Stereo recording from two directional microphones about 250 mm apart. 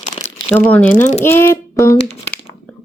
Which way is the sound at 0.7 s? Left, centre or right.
Centre.